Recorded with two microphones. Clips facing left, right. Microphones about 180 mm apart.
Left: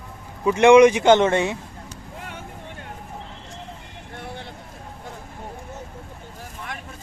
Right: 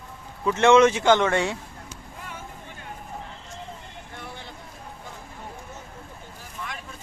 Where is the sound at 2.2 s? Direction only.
75° left (ahead or behind).